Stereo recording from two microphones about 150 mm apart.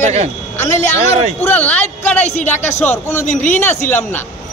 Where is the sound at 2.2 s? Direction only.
50° left (ahead or behind).